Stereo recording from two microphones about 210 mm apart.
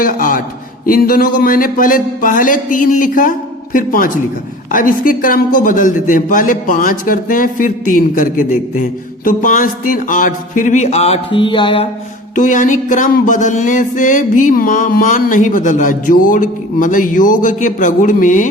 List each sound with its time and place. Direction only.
0.0 s a man's voice: 40° left (ahead or behind)
1.4 s music: 40° left (ahead or behind); by 11.9 s 25° left (ahead or behind)
12.3 s music: 40° left (ahead or behind)